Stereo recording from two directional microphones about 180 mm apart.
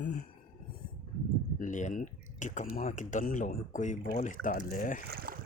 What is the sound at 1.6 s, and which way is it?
Speech, 45° left (ahead or behind).